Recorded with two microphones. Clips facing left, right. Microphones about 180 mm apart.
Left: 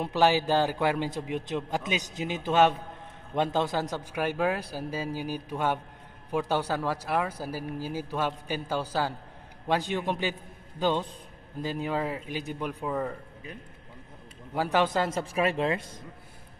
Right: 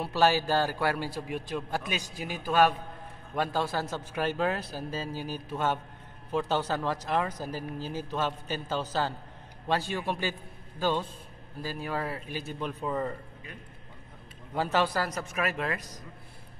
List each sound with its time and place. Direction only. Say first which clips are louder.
0.0 s a man's voice: left 1 dB; 15° left (ahead or behind)
14.5 s a man's voice: left 2 dB; 10° left (ahead or behind)